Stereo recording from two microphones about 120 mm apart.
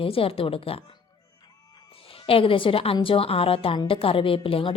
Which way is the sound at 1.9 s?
50° left (ahead or behind).